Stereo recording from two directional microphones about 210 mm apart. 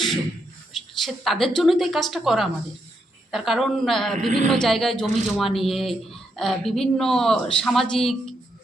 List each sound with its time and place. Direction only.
0.7 s a woman's voice: centre (ahead or behind)
4.3 s a man's voice: 35° right (ahead or behind)
4.5 s speech: centre (ahead or behind)